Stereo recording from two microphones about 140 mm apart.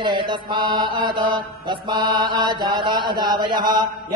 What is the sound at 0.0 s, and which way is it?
Mantra, 35° right (ahead or behind).